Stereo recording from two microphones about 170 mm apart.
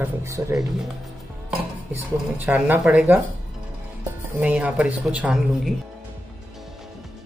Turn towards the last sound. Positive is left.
turn(degrees=-5)  # may be behind; listen again after turning